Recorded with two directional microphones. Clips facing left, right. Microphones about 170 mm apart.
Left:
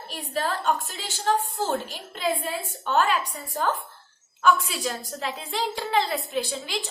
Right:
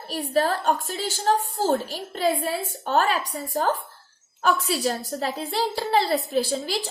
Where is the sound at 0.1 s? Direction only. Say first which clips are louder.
Right 6 dB; 40° right (ahead or behind).